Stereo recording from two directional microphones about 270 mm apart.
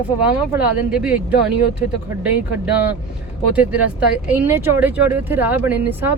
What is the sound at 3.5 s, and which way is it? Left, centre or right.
Speech, centre.